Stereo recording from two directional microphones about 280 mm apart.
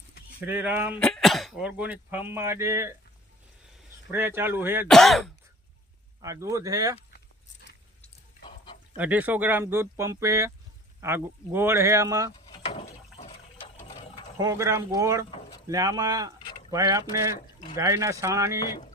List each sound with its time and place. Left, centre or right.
0.4 s speech: centre
4.1 s speech: centre
6.2 s speech: centre
8.4 s chicken: centre
9.0 s speech: centre
12.5 s a sound: left
13.7 s ratchet: centre
14.3 s speech: centre